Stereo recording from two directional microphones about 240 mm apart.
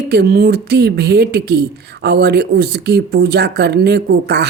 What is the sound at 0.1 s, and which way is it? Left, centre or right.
Speech, right.